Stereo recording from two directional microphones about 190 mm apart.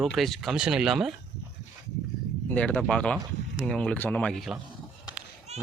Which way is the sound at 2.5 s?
5° left (ahead or behind).